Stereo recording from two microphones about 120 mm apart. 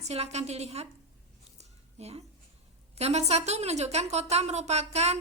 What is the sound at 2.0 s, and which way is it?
A woman's voice, 60° right (ahead or behind).